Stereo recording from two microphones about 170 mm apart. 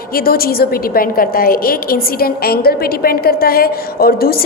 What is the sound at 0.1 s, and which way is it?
A woman's voice, 60° left (ahead or behind).